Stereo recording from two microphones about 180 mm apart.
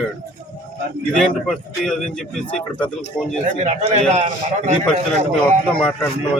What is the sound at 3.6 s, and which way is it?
A man's voice, 40° right (ahead or behind).